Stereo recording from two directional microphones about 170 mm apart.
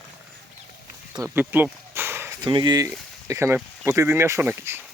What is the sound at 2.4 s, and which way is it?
Speech, 25° right (ahead or behind).